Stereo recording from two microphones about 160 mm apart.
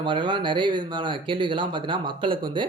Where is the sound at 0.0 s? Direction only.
30° right (ahead or behind).